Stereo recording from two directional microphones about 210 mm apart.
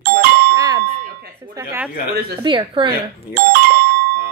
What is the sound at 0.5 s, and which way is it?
A woman's voice, 20° right (ahead or behind).